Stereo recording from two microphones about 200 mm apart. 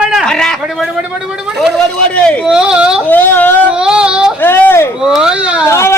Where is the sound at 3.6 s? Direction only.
5° right (ahead or behind).